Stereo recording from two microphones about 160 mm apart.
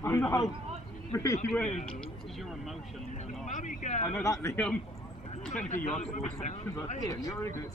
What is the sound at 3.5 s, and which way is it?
Speech, 50° left (ahead or behind).